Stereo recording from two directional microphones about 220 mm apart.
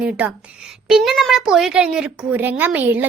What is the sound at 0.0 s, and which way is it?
A woman's voice, 5° right (ahead or behind).